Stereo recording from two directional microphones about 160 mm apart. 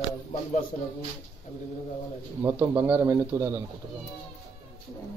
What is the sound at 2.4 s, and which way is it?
A man's voice, 20° right (ahead or behind).